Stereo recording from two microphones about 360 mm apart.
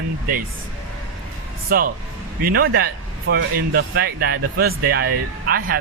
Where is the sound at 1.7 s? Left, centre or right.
Right.